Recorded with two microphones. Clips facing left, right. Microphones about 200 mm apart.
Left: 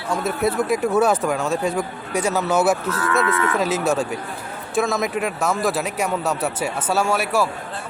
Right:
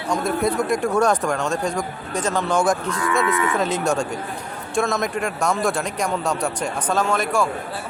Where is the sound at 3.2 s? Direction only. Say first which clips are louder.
Even; 15° right (ahead or behind).